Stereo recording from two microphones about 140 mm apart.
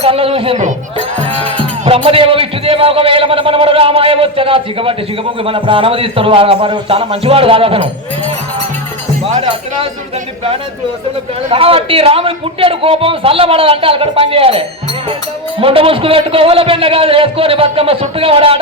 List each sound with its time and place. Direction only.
0.0 s a man's voice: 45° right (ahead or behind)
11.4 s a man's voice: 40° right (ahead or behind)
15.6 s a man's voice: 40° right (ahead or behind)